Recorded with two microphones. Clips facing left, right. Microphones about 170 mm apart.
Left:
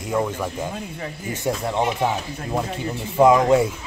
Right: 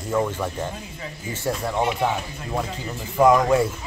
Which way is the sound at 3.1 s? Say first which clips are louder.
Left 2 dB; 20° left (ahead or behind).